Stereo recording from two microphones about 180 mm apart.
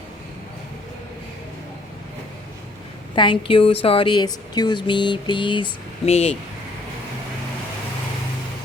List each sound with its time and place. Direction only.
3.2 s speech: 25° left (ahead or behind)